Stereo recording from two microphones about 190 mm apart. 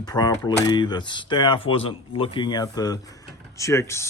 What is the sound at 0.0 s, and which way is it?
Speech, 20° left (ahead or behind).